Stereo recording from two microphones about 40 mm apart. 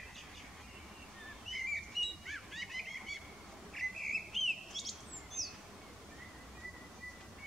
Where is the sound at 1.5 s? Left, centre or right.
Centre.